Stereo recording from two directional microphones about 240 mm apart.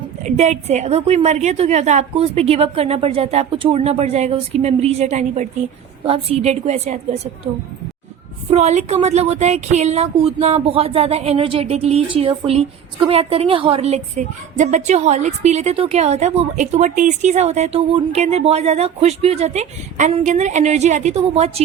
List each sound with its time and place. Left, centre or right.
0.2 s speech: right